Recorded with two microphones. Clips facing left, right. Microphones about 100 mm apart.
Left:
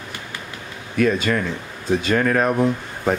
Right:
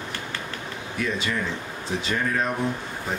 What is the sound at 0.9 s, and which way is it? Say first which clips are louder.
Speech: left 9 dB; 60° left (ahead or behind).